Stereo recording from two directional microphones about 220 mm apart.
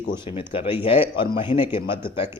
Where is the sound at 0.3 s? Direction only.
25° left (ahead or behind).